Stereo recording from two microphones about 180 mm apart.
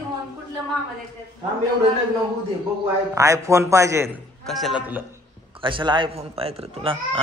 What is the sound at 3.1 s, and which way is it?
Speech, 15° right (ahead or behind).